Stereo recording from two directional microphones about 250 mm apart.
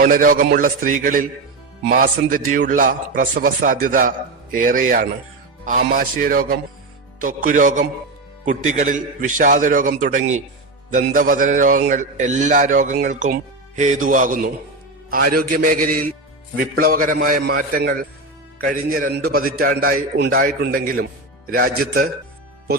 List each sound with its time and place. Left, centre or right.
0.0 s a man's voice: right
2.3 s a man's voice: right